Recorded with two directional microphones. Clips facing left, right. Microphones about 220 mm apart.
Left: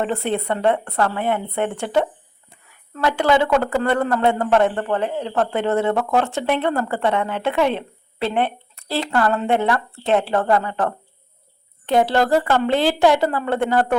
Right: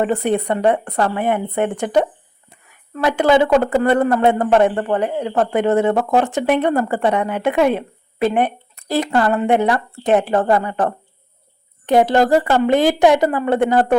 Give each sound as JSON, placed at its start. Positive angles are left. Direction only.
{"t": 0.0, "sound": "speech", "side_deg": -15}